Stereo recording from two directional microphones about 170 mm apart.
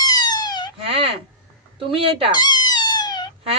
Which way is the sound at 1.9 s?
35° right (ahead or behind).